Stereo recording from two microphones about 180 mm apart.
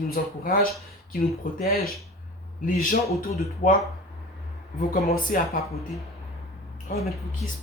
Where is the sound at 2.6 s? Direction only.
50° left (ahead or behind).